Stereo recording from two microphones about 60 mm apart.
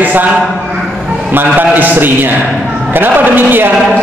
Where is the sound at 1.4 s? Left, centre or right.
Right.